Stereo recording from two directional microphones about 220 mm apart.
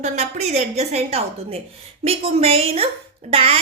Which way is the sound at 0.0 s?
30° right (ahead or behind).